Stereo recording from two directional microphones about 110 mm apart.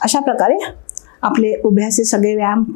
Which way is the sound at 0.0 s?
25° left (ahead or behind).